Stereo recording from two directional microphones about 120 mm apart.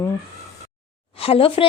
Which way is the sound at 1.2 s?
50° left (ahead or behind).